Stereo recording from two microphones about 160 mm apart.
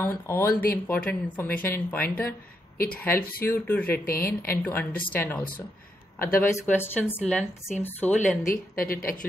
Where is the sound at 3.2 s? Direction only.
65° left (ahead or behind).